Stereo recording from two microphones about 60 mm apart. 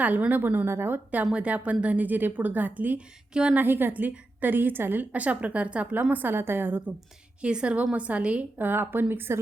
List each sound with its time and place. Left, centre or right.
0.0 s a woman's voice: right
7.4 s a woman's voice: centre
8.6 s speech: right